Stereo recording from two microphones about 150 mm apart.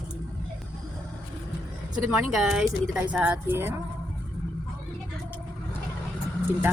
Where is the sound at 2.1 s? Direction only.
5° right (ahead or behind).